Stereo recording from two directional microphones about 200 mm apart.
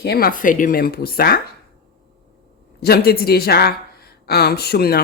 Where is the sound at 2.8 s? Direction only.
50° left (ahead or behind).